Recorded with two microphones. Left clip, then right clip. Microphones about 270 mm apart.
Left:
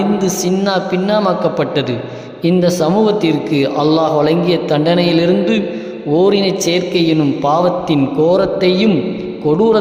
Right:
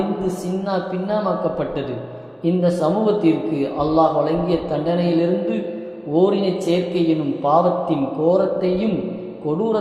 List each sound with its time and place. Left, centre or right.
0.6 s a man's voice: left